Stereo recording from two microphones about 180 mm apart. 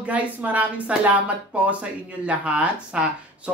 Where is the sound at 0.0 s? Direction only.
10° right (ahead or behind).